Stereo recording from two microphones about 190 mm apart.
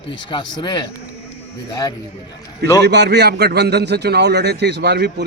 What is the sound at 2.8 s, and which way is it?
A man's voice, 60° right (ahead or behind).